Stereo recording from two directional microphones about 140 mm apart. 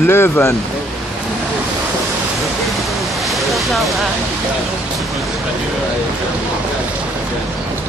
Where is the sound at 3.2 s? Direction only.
Centre (ahead or behind).